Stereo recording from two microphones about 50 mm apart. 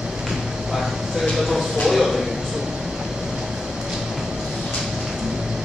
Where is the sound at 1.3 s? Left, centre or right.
Centre.